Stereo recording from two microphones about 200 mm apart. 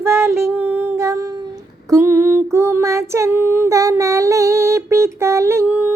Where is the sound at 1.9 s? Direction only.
15° right (ahead or behind).